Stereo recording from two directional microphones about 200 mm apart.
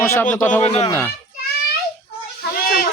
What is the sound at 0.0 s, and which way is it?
Speech, 10° left (ahead or behind).